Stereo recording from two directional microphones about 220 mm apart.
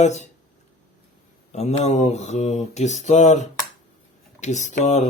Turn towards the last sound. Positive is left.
turn(degrees=30)  # may be behind; listen again after turning